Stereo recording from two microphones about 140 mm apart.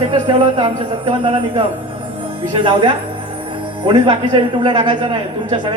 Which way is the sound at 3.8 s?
35° right (ahead or behind).